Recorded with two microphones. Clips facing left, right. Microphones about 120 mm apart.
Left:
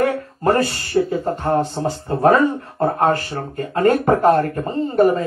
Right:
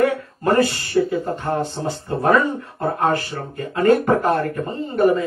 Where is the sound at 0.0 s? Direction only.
35° left (ahead or behind).